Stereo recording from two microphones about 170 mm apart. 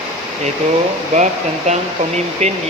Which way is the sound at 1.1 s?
45° right (ahead or behind).